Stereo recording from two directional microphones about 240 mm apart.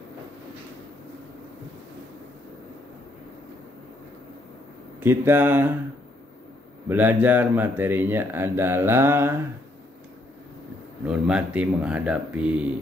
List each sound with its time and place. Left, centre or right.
5.0 s speech: centre
6.9 s speech: centre
11.1 s speech: centre